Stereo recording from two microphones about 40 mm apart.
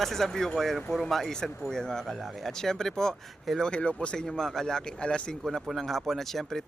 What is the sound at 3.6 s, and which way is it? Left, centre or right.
Speech, left.